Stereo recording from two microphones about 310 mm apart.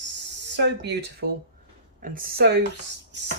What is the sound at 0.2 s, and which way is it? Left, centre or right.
Speech, right.